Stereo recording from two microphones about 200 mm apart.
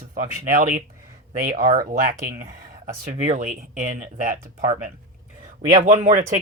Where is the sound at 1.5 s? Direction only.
45° right (ahead or behind).